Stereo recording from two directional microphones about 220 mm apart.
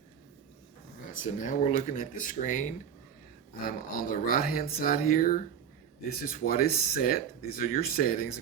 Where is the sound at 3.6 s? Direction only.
40° left (ahead or behind).